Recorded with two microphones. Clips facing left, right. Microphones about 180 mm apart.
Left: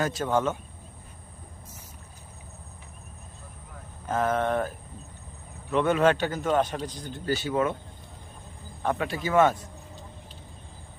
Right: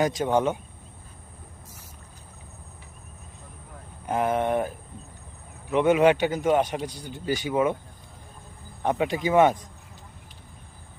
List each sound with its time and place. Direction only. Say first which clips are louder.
0.0 s a man's voice: right 3 dB; 15° right (ahead or behind)
4.0 s a man's voice: right 1 dB; 15° right (ahead or behind)
5.7 s a man's voice: right 3 dB; 15° right (ahead or behind)
8.8 s a man's voice: right 4 dB; 15° right (ahead or behind)